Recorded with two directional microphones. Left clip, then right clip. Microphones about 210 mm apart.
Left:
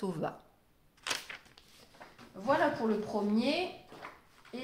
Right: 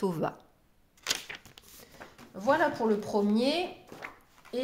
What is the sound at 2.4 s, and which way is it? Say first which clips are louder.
Speech: right 3 dB; 55° right (ahead or behind).